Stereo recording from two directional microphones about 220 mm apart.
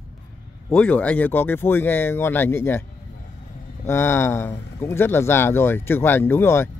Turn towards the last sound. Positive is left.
turn(degrees=10)  # may be behind; listen again after turning